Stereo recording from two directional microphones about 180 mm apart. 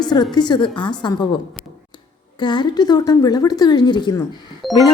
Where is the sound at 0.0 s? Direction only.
25° left (ahead or behind).